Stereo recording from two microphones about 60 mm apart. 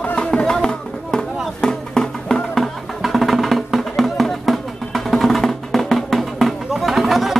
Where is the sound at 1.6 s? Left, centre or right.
Centre.